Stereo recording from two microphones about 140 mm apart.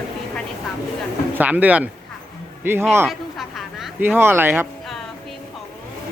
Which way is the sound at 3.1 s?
Centre (ahead or behind).